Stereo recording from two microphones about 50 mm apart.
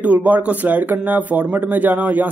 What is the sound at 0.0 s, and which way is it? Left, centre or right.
Speech, right.